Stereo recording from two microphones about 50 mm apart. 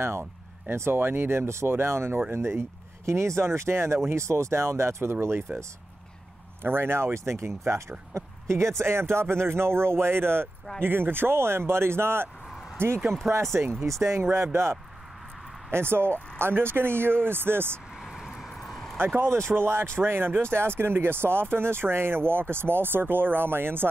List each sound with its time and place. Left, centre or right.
0.0 s speech: right
4.1 s speech: right
6.6 s speech: right
13.3 s speech: right
13.8 s speech: right
14.3 s speech: right
18.0 s vehicle: centre
19.3 s speech: right